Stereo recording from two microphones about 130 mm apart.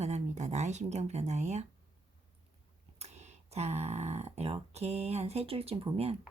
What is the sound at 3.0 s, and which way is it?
Speech, 60° right (ahead or behind).